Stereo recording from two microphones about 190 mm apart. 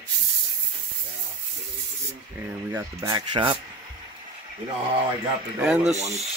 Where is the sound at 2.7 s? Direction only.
15° right (ahead or behind).